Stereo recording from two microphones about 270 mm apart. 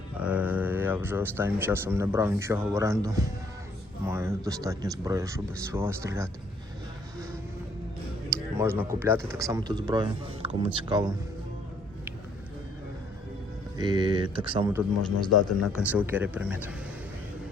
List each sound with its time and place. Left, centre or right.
0.2 s speech: centre
8.3 s a sound: centre
9.0 s speech: centre
13.7 s speech: centre
15.3 s speech: left
15.7 s speech: centre